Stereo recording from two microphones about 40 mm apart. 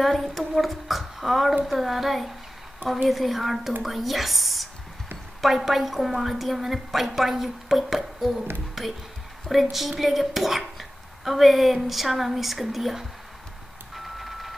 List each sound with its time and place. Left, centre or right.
0.0 s dishes: centre
9.5 s dishes: centre
13.9 s reversing beeps: centre